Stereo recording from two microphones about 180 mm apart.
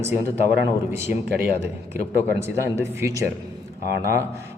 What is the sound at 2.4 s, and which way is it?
Speech, 15° right (ahead or behind).